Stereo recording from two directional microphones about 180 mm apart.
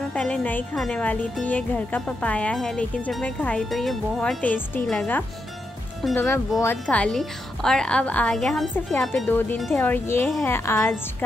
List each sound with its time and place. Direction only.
0.1 s a woman's voice: 5° left (ahead or behind)